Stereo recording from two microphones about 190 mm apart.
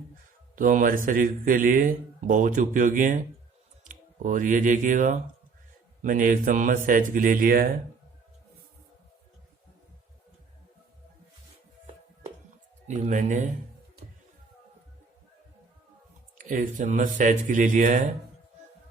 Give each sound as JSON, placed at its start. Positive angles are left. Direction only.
{"t": 0.5, "sound": "a man's voice", "side_deg": -45}
{"t": 12.9, "sound": "speech", "side_deg": -40}
{"t": 16.4, "sound": "a man's voice", "side_deg": -45}